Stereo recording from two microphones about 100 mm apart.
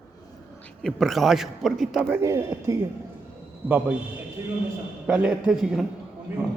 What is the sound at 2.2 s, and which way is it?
Speech, 30° right (ahead or behind).